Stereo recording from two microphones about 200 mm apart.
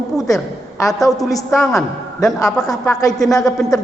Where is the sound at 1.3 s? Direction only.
15° left (ahead or behind).